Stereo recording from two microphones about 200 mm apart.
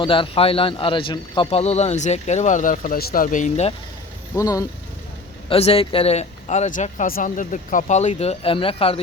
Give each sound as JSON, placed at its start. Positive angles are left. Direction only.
{"t": 0.0, "sound": "speech", "side_deg": 25}
{"t": 4.4, "sound": "speech", "side_deg": 15}
{"t": 5.5, "sound": "speech", "side_deg": 30}